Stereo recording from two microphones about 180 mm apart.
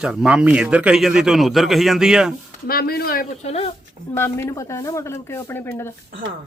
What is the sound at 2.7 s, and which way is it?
Speech, 55° left (ahead or behind).